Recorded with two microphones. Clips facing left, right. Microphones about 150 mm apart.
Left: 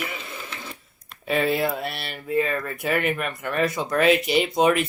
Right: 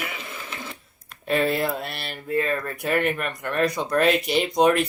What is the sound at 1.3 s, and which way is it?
Speech, centre (ahead or behind).